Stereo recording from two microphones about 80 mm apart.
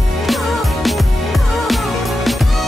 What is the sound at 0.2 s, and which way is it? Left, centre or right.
Music, centre.